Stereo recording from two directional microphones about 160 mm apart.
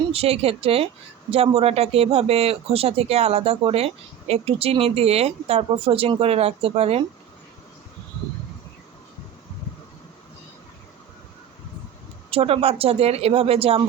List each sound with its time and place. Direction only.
0.0 s speech: 40° right (ahead or behind)
12.3 s speech: 35° right (ahead or behind)